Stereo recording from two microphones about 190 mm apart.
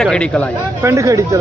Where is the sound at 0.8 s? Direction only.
15° right (ahead or behind).